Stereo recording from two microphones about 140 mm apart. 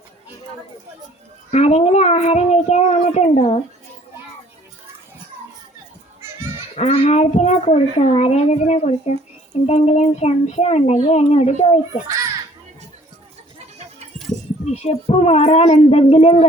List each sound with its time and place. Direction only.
1.5 s speech: 50° left (ahead or behind)
6.7 s speech: 55° left (ahead or behind)
14.6 s speech: 50° left (ahead or behind)